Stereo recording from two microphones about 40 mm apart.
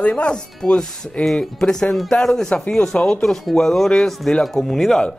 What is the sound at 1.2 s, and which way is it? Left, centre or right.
A man's voice, centre.